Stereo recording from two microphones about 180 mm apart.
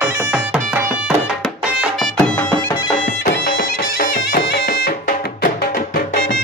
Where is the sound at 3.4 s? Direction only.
60° left (ahead or behind).